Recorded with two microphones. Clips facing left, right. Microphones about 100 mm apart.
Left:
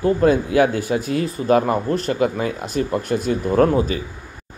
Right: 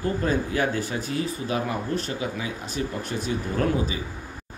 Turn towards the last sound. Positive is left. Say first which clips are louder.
# left 9 dB
turn(degrees=50)  # may be behind; listen again after turning